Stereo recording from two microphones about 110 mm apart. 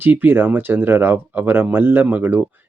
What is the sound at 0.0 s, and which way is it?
Speech, 20° right (ahead or behind).